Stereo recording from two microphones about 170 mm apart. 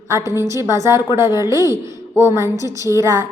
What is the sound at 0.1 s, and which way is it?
A woman's voice, 15° right (ahead or behind).